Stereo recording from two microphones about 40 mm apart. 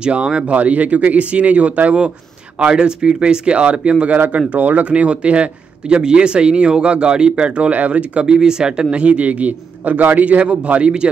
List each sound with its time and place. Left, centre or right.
0.0 s speech: right
0.5 s speech: right
4.5 s speech: right
4.8 s speech: right
8.3 s speech: centre
8.9 s speech: right
10.8 s speech: right